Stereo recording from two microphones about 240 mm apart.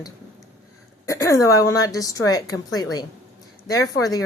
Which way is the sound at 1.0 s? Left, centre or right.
Centre.